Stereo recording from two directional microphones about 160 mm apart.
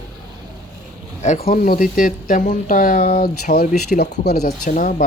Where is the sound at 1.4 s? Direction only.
60° left (ahead or behind).